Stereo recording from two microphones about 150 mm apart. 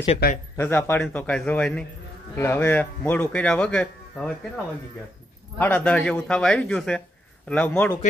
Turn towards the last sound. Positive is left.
turn(degrees=10)  # may be behind; listen again after turning